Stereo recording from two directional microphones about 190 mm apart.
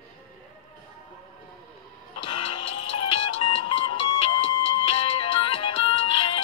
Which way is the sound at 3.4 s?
25° left (ahead or behind).